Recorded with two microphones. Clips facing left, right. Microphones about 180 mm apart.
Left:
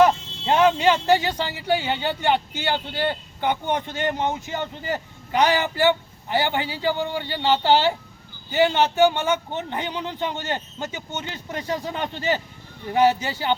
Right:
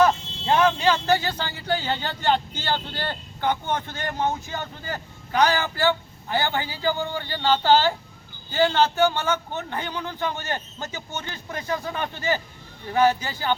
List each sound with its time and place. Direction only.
0.0 s speech: 20° left (ahead or behind)